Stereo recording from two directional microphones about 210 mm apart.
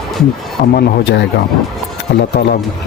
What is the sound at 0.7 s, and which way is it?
Speech, 55° left (ahead or behind).